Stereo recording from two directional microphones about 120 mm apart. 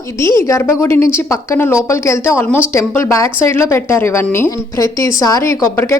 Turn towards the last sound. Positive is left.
turn(degrees=25)  # may be behind; listen again after turning